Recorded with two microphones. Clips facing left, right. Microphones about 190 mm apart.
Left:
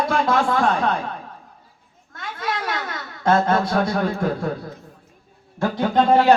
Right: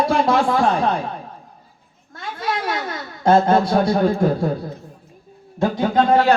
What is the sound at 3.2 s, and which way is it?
Speech, 30° right (ahead or behind).